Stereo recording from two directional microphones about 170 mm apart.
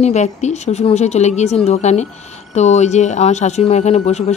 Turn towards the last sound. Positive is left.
turn(degrees=40)  # may be behind; listen again after turning